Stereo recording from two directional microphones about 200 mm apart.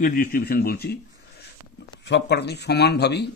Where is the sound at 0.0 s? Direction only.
45° left (ahead or behind).